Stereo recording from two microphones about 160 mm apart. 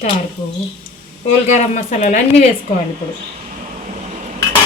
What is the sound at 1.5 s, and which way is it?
Speech, 50° left (ahead or behind).